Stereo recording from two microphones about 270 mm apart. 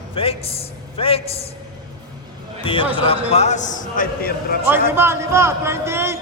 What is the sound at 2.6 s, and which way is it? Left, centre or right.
A man's voice, centre.